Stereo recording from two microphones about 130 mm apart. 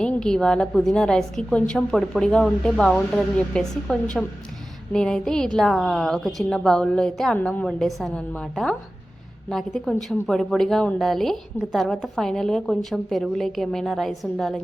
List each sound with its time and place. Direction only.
0.0 s a woman's voice: 5° left (ahead or behind)